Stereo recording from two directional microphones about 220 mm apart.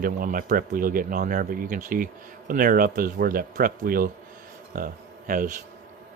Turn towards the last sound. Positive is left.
turn(degrees=-35)  # may be behind; listen again after turning